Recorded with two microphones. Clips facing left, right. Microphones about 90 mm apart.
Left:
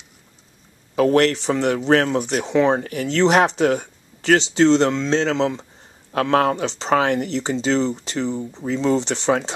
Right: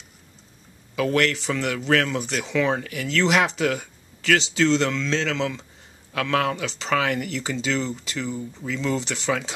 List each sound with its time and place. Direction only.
0.9 s speech: 35° left (ahead or behind)